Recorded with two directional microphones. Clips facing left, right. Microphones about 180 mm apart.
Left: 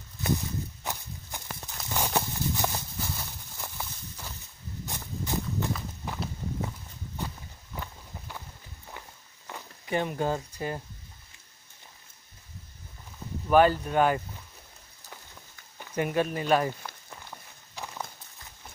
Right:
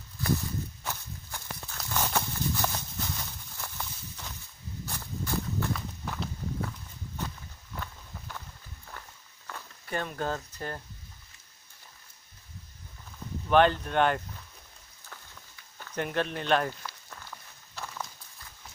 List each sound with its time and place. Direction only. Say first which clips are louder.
0.2 s walk: even; 20° left (ahead or behind)
4.8 s horse: left 1 dB; 15° left (ahead or behind)
5.7 s clip-clop: even; 10° left (ahead or behind)
7.2 s walk: left 1 dB; 10° left (ahead or behind)
9.5 s a sound: left 5 dB; 15° left (ahead or behind)
13.5 s speech: left 2 dB; 5° left (ahead or behind)
15.8 s speech: left 3 dB; 10° left (ahead or behind)
16.8 s walk: left 1 dB; 20° left (ahead or behind)